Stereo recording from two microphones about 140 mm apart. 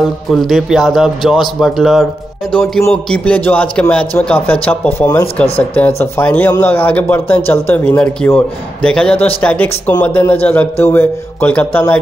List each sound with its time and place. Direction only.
0.0 s a man's voice: centre (ahead or behind)
4.9 s speech: 25° left (ahead or behind)
5.4 s speech: 10° left (ahead or behind)